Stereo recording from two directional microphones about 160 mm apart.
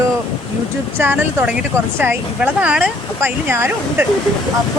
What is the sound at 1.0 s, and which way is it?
Speech, 15° right (ahead or behind).